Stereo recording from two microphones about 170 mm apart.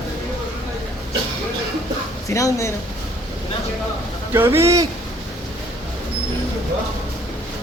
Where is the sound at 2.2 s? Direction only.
20° left (ahead or behind).